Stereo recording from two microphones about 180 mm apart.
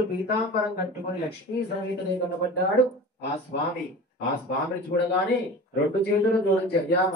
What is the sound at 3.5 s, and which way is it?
Speech, 60° left (ahead or behind).